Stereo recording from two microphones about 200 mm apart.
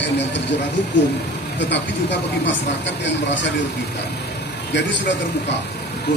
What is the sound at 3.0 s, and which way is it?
Speech, 65° left (ahead or behind).